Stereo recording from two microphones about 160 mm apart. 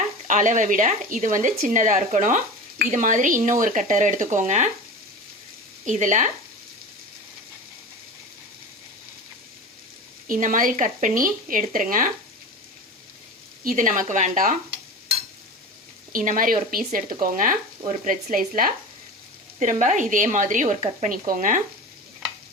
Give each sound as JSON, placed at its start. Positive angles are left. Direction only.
{"t": 0.3, "sound": "speech", "side_deg": -50}
{"t": 5.8, "sound": "speech", "side_deg": -50}
{"t": 10.2, "sound": "speech", "side_deg": -55}
{"t": 13.7, "sound": "speech", "side_deg": -55}
{"t": 16.1, "sound": "speech", "side_deg": -55}